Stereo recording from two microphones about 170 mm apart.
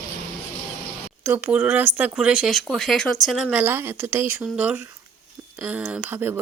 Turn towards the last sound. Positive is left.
turn(degrees=-10)  # may be behind; listen again after turning